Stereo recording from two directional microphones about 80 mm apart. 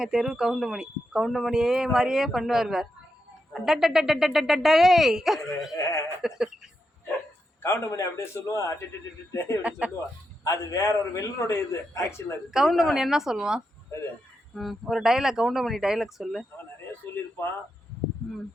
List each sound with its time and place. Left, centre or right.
0.0 s speech: centre
5.7 s a man's voice: left
6.2 s a sound: centre
7.6 s a man's voice: left
9.6 s a sound: centre
10.4 s a man's voice: left
12.5 s speech: centre